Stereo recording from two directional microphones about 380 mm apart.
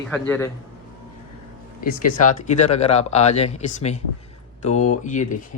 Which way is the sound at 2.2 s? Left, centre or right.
Centre.